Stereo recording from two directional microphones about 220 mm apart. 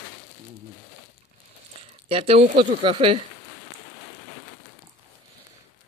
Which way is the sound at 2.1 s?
25° right (ahead or behind).